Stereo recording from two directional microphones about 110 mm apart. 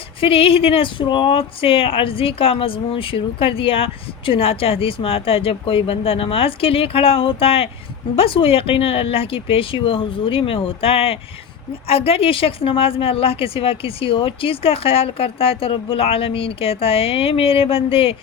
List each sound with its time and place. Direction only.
0.2 s speech: 55° left (ahead or behind)